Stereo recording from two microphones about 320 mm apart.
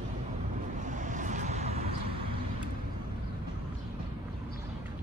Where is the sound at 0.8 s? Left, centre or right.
Right.